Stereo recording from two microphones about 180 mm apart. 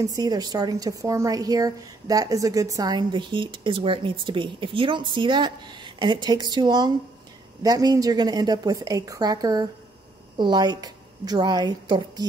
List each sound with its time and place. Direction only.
0.0 s a woman's voice: 20° right (ahead or behind)